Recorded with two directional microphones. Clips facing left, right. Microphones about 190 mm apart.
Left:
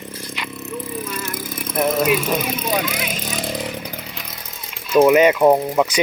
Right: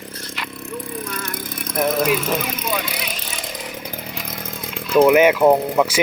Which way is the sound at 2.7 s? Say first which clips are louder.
Left 4 dB; 45° left (ahead or behind).